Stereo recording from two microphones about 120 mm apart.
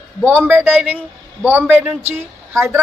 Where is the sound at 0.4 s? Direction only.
15° right (ahead or behind).